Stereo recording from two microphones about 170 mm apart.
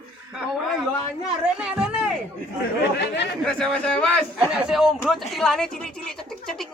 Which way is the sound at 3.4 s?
5° left (ahead or behind).